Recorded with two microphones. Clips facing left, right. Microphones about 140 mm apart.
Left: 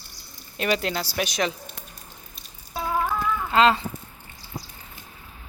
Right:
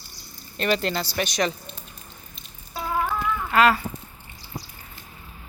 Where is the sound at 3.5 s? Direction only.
25° left (ahead or behind).